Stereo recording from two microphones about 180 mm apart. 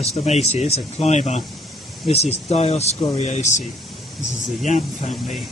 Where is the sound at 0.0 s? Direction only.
35° left (ahead or behind).